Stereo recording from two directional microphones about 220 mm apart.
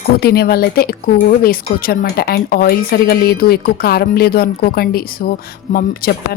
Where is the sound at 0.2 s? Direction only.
45° left (ahead or behind).